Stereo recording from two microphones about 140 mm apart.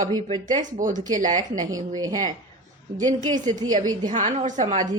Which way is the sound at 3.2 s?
30° right (ahead or behind).